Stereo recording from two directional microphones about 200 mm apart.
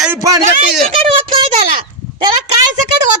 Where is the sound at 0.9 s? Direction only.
25° right (ahead or behind).